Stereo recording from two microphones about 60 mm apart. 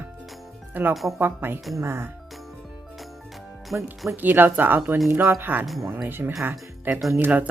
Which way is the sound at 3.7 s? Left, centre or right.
Centre.